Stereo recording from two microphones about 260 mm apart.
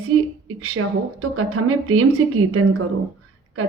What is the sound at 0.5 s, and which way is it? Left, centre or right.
Speech, right.